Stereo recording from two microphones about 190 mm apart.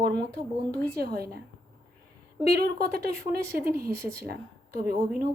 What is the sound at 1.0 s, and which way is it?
Speech, 55° right (ahead or behind).